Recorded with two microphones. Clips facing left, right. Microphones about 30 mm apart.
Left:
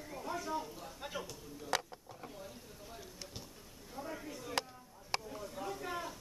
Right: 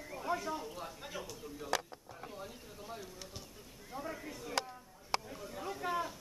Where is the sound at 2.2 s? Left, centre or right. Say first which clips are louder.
Right 3 dB; right.